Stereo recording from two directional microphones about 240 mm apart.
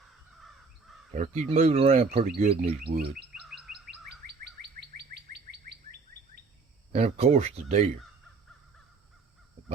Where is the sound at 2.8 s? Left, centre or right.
Right.